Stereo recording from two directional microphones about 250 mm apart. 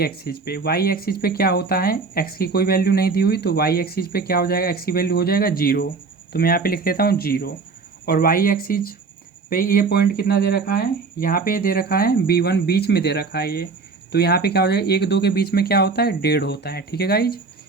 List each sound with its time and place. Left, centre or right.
0.0 s speech: left